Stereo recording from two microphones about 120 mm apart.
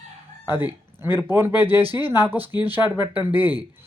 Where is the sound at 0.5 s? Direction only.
15° right (ahead or behind).